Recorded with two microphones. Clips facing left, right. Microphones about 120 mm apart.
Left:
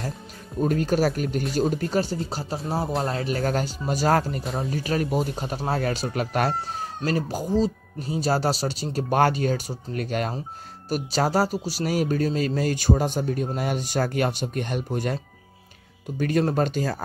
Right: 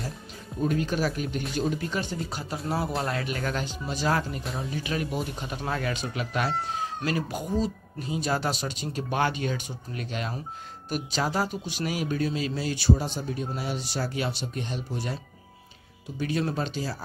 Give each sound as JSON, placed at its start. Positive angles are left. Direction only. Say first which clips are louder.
{"t": 0.6, "sound": "speech", "louder": "left 4 dB", "side_deg": 45}
{"t": 16.2, "sound": "speech", "louder": "left 6 dB", "side_deg": 50}